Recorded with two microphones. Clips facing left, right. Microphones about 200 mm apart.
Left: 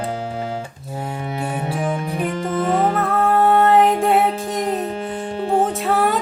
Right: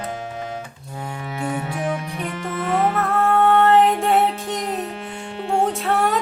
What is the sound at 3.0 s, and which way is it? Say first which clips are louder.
Music: left 1 dB; centre (ahead or behind).